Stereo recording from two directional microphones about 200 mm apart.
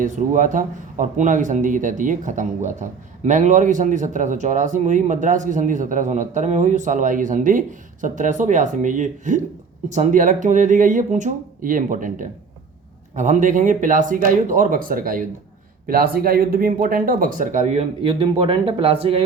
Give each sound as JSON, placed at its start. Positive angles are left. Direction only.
{"t": 0.0, "sound": "speech", "side_deg": -40}